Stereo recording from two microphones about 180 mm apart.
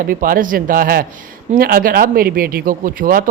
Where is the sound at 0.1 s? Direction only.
50° right (ahead or behind).